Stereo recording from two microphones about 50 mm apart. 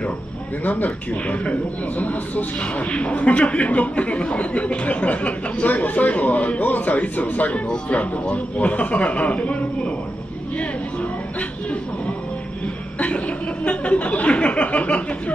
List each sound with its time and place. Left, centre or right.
0.7 s a man's voice: left
13.7 s a man's voice: left